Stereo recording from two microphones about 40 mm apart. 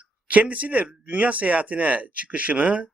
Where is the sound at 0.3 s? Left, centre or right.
Right.